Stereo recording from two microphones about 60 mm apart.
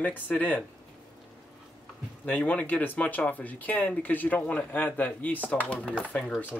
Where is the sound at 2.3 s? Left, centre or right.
Centre.